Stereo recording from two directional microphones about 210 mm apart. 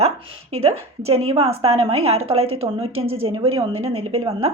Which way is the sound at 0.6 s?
30° right (ahead or behind).